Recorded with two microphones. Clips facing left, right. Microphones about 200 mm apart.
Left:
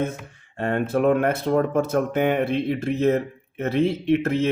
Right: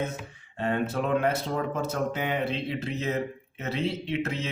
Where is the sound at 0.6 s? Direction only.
55° left (ahead or behind).